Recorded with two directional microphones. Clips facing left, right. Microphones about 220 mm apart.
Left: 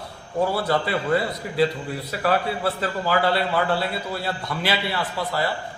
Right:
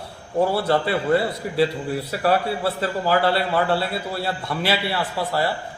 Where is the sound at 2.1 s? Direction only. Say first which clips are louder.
Right 1 dB; 30° right (ahead or behind).